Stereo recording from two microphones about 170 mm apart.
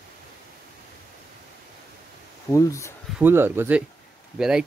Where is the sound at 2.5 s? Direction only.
20° left (ahead or behind).